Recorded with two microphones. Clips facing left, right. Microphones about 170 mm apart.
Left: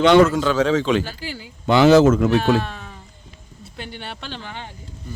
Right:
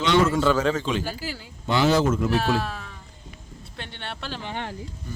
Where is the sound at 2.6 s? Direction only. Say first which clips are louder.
Left 3 dB; centre (ahead or behind).